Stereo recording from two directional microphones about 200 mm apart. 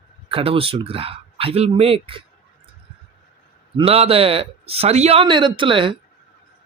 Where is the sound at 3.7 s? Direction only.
30° right (ahead or behind).